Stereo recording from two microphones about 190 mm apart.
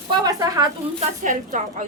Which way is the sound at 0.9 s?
40° right (ahead or behind).